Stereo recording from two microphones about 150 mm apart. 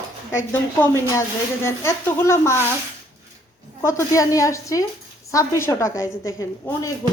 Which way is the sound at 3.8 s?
20° left (ahead or behind).